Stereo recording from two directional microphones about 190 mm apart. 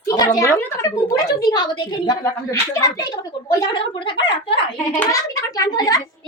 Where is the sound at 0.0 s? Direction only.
20° left (ahead or behind).